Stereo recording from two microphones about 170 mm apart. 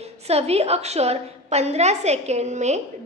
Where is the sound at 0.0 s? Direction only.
40° right (ahead or behind).